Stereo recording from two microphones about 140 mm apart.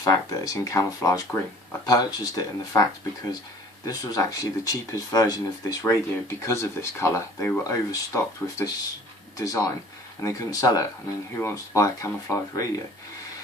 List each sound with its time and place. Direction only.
0.0 s speech: 25° left (ahead or behind)